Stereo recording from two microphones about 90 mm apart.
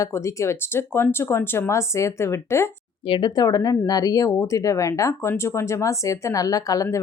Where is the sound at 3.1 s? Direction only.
70° left (ahead or behind).